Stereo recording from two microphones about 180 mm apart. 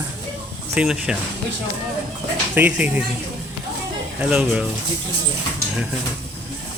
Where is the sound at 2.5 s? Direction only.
10° right (ahead or behind).